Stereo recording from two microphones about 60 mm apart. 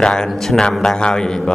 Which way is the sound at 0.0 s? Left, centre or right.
Centre.